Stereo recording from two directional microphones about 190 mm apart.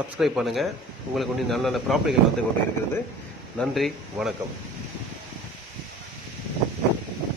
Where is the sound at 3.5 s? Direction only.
Centre (ahead or behind).